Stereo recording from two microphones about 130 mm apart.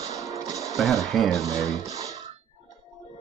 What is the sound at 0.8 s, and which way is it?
Speech, centre (ahead or behind).